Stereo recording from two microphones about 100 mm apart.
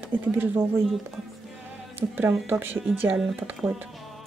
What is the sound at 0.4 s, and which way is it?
Speech, 20° right (ahead or behind).